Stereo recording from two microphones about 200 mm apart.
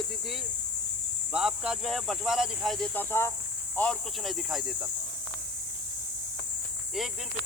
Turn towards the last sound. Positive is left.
turn(degrees=0)  # may be behind; listen again after turning